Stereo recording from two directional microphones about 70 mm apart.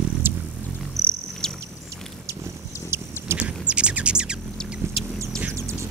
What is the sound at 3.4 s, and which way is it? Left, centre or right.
Bird, centre.